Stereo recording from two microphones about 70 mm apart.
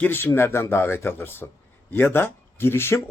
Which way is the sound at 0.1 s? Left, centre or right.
Left.